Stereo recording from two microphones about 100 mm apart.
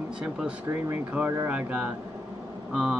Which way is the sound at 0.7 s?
20° right (ahead or behind).